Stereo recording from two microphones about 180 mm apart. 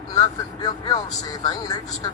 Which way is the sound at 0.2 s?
20° left (ahead or behind).